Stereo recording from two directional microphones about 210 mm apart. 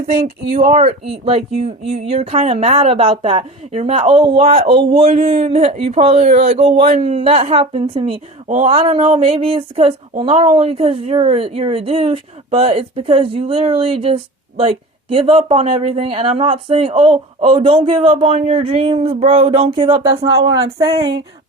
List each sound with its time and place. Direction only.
0.5 s a man's voice: 35° right (ahead or behind)